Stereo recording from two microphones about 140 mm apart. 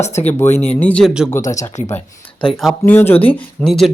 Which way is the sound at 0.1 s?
15° left (ahead or behind).